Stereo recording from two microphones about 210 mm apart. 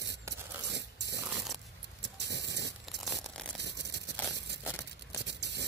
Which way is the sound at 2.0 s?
55° right (ahead or behind).